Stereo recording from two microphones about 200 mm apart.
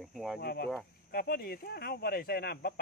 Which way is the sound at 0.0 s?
Centre (ahead or behind).